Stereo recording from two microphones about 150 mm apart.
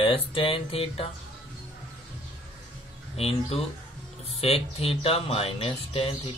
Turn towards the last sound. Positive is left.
turn(degrees=40)  # may be behind; listen again after turning